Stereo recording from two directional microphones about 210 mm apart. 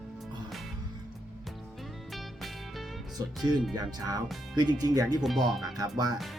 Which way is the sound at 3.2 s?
15° right (ahead or behind).